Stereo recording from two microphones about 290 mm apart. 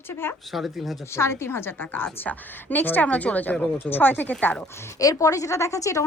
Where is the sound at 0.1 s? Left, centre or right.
Centre.